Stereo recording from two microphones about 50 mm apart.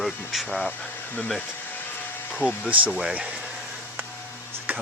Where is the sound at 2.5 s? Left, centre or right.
Right.